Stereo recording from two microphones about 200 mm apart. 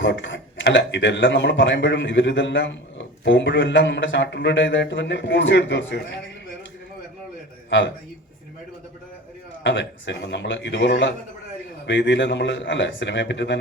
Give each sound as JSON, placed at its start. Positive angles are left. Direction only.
{"t": 0.0, "sound": "speech", "side_deg": 65}
{"t": 7.7, "sound": "a man's voice", "side_deg": 65}
{"t": 9.6, "sound": "speech", "side_deg": 65}